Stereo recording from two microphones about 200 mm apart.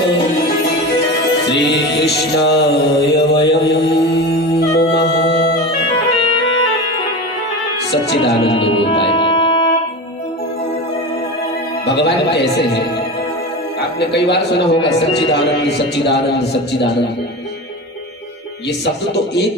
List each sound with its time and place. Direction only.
1.5 s music: 60° left (ahead or behind)
8.2 s speech: 25° left (ahead or behind)
9.2 s music: 25° left (ahead or behind)
11.8 s a man's voice: 60° left (ahead or behind)
13.7 s speech: 55° left (ahead or behind)